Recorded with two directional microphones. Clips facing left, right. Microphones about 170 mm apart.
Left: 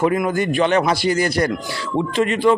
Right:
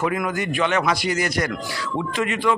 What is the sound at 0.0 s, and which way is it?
A man's voice, 30° left (ahead or behind).